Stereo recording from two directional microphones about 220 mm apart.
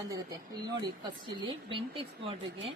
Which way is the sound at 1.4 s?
25° right (ahead or behind).